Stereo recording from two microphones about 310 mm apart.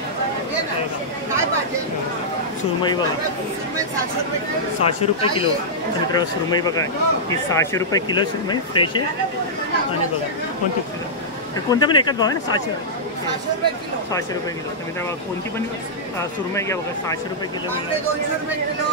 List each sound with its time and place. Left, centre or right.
4.8 s speech: centre
11.7 s speech: centre
16.5 s speech: centre